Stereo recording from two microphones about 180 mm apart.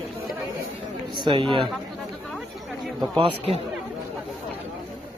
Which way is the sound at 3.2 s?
35° right (ahead or behind).